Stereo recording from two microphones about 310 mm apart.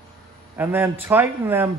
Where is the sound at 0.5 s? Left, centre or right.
Centre.